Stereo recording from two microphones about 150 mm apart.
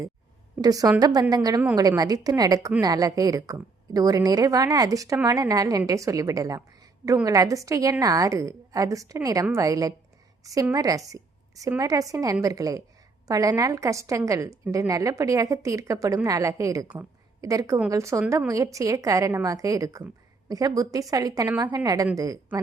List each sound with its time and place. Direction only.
0.6 s a woman's voice: 25° right (ahead or behind)